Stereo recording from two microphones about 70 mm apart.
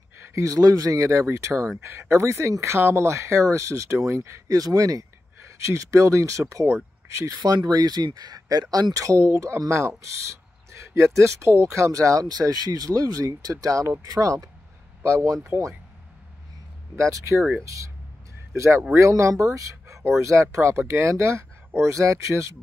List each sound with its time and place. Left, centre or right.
0.3 s speech: right
4.6 s speech: right
7.4 s speech: right
15.0 s speech: right
16.9 s speech: right
18.5 s speech: right